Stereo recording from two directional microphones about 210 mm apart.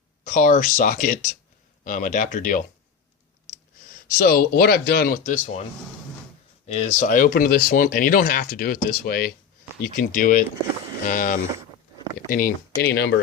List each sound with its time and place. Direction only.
0.3 s speech: 35° left (ahead or behind)
4.3 s speech: 45° left (ahead or behind)
6.7 s speech: 35° left (ahead or behind); by 13.1 s 50° left (ahead or behind)